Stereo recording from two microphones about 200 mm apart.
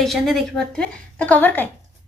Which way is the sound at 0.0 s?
Centre (ahead or behind).